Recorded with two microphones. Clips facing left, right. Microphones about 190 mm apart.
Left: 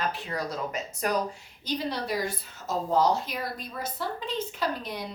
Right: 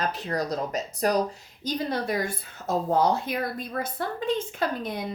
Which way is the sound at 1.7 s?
50° right (ahead or behind).